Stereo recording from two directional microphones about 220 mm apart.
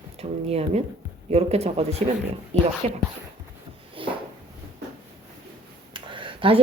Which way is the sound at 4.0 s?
25° right (ahead or behind).